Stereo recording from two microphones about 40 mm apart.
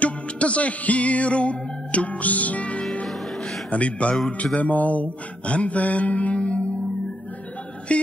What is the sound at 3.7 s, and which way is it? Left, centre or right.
Speech, left.